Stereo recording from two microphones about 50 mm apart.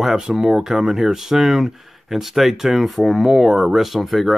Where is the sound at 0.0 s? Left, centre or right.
Centre.